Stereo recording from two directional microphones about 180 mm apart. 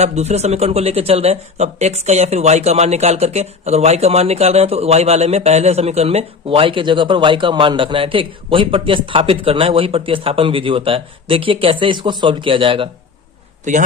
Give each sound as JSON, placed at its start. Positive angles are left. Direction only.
{"t": 0.0, "sound": "speech", "side_deg": -35}
{"t": 13.7, "sound": "a man's voice", "side_deg": -40}